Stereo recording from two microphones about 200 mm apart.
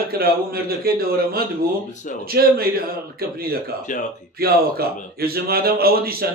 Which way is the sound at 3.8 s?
40° left (ahead or behind).